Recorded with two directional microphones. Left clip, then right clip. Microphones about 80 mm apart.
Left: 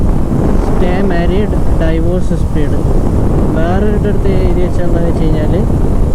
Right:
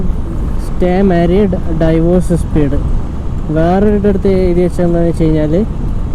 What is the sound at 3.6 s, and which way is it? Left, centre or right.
Speech, centre.